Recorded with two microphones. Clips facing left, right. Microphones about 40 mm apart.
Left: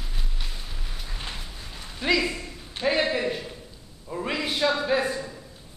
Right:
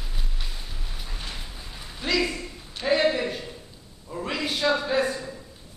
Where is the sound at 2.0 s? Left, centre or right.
Centre.